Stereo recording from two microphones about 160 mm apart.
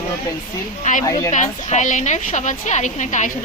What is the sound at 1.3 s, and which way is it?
A woman's voice, 50° left (ahead or behind).